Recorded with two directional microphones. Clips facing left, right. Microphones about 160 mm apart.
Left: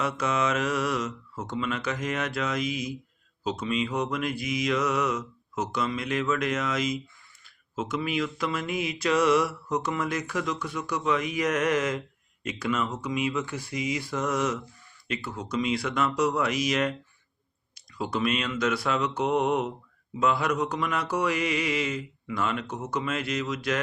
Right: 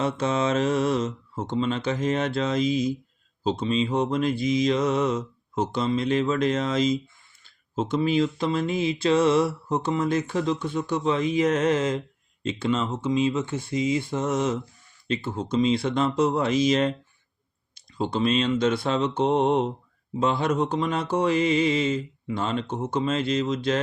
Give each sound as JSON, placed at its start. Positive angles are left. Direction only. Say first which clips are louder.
{"t": 0.0, "sound": "speech", "louder": "right 3 dB", "side_deg": -30}